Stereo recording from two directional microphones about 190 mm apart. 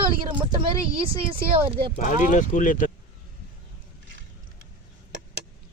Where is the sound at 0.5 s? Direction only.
25° right (ahead or behind).